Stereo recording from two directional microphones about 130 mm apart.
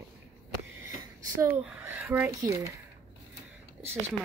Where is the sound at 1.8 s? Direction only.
15° right (ahead or behind).